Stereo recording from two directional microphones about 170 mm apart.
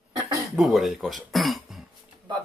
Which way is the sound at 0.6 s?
Centre (ahead or behind).